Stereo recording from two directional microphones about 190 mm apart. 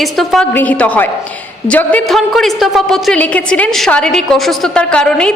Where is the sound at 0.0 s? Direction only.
Centre (ahead or behind).